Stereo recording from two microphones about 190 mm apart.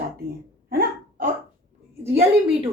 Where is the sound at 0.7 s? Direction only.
50° right (ahead or behind).